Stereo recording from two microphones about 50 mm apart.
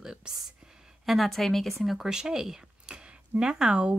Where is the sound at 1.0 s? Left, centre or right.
Centre.